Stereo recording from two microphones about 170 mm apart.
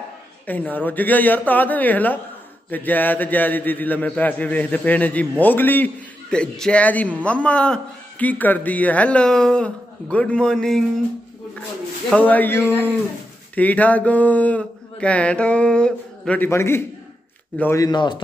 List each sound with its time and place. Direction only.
0.5 s a man's voice: 10° left (ahead or behind)
12.1 s a man's voice: 10° left (ahead or behind); by 18.2 s 25° left (ahead or behind)